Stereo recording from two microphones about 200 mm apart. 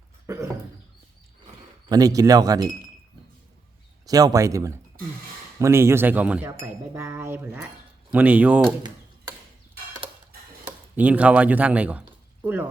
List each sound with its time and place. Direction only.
0.3 s speech: 15° right (ahead or behind)
1.9 s speech: 15° right (ahead or behind)
4.0 s speech: 20° right (ahead or behind)
10.9 s speech: 5° right (ahead or behind)